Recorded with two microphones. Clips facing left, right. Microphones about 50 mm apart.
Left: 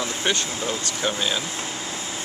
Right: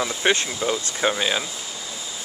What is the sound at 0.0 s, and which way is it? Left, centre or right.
Speech, right.